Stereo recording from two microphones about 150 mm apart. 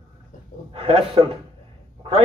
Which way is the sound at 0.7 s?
40° right (ahead or behind).